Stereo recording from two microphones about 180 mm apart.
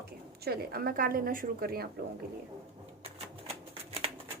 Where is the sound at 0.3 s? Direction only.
60° right (ahead or behind).